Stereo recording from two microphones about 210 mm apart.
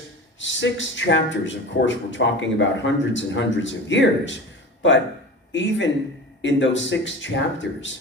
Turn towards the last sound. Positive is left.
turn(degrees=60)  # may be behind; listen again after turning